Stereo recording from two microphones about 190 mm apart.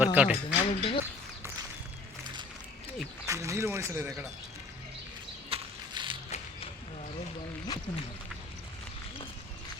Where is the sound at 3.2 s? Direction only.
15° right (ahead or behind).